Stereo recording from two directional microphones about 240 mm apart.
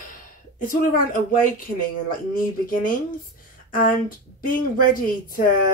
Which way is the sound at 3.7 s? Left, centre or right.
Left.